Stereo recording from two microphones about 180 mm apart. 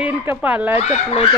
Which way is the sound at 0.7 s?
35° left (ahead or behind).